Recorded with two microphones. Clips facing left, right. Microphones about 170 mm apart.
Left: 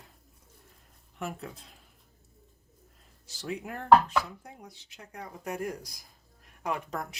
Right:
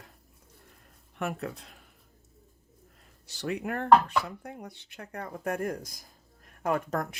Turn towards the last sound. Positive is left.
turn(degrees=-50)  # may be behind; listen again after turning